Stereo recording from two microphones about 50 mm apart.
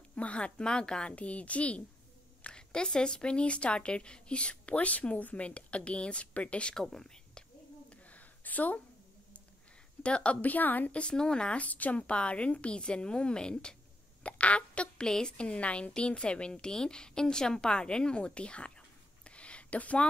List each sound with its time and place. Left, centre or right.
0.1 s a woman's voice: left
6.7 s speech: centre
7.9 s a sound: left
10.0 s a woman's voice: left
11.0 s a woman's voice: centre
11.6 s a woman's voice: left; by 13.7 s centre
14.2 s a sound: left
15.0 s a woman's voice: centre
19.2 s a sound: left